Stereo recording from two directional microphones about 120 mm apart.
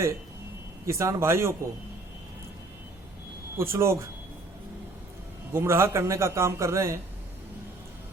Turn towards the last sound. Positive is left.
turn(degrees=-25)  # may be behind; listen again after turning